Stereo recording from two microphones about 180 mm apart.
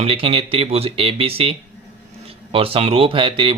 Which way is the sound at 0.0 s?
30° right (ahead or behind).